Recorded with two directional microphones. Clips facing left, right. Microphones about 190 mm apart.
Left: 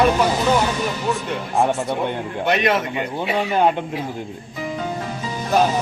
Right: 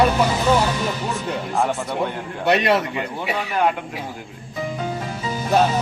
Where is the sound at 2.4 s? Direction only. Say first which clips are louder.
Right 2 dB; 35° right (ahead or behind).